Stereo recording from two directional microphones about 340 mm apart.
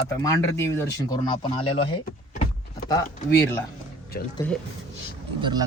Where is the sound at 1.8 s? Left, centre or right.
Centre.